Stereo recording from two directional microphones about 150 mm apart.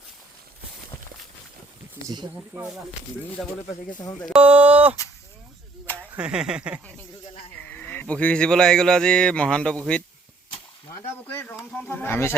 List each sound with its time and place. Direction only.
2.0 s speech: 20° right (ahead or behind)
3.4 s speech: 5° right (ahead or behind)
4.0 s speech: 25° left (ahead or behind)
4.3 s speech: 10° right (ahead or behind)
6.1 s speech: 5° right (ahead or behind)
7.7 s speech: 10° left (ahead or behind)
11.3 s snake: 15° left (ahead or behind)